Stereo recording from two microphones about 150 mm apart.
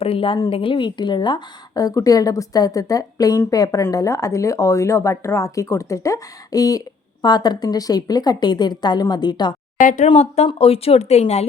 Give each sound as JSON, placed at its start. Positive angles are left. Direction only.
{"t": 0.0, "sound": "a woman's voice", "side_deg": 35}
{"t": 9.8, "sound": "speech", "side_deg": 55}
{"t": 10.1, "sound": "speech", "side_deg": 45}